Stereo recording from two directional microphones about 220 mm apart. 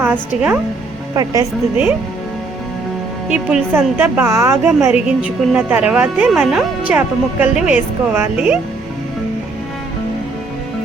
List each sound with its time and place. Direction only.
0.0 s a woman's voice: 10° right (ahead or behind)
3.2 s a woman's voice: 5° right (ahead or behind)